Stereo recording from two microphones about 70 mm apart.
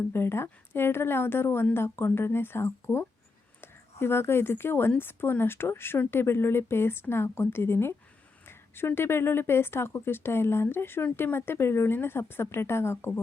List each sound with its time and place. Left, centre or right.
0.0 s speech: left